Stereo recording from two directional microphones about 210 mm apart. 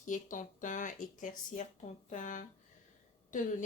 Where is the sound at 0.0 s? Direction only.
40° left (ahead or behind).